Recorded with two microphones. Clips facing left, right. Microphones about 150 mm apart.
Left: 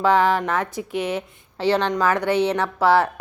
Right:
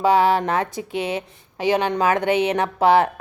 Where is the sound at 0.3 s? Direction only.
20° right (ahead or behind).